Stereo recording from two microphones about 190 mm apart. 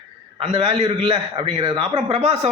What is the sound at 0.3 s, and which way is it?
A man's voice, 30° right (ahead or behind).